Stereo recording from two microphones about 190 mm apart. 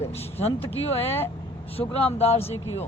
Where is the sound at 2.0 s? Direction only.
30° left (ahead or behind).